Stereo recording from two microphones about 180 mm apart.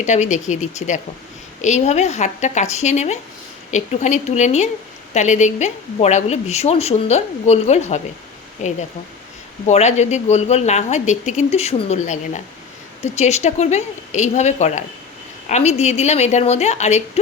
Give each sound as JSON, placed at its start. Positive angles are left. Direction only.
{"t": 0.0, "sound": "a woman's voice", "side_deg": 40}
{"t": 9.6, "sound": "a woman's voice", "side_deg": 40}